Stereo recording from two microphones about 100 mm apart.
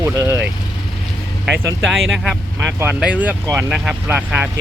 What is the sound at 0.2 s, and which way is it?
Speech, 30° right (ahead or behind).